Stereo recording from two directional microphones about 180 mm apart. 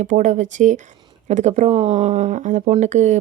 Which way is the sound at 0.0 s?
40° right (ahead or behind).